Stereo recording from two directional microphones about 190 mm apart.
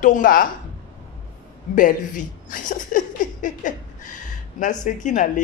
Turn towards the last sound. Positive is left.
turn(degrees=40)  # may be behind; listen again after turning